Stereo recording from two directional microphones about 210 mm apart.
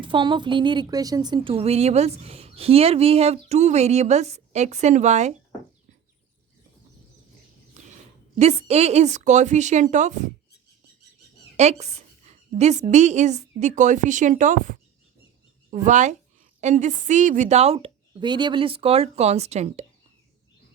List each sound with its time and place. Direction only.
0.0 s a woman's voice: 25° right (ahead or behind)
8.4 s speech: 30° right (ahead or behind)
11.5 s a woman's voice: 30° right (ahead or behind)